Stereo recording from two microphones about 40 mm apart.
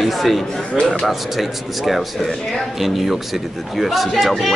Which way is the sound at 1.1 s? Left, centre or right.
Centre.